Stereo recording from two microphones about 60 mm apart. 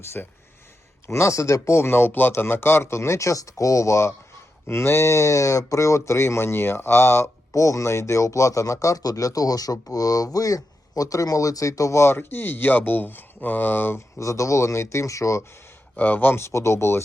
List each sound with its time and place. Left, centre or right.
0.0 s speech: left
1.0 s speech: left
7.5 s a man's voice: left
12.0 s speech: left
14.2 s speech: left
16.0 s speech: left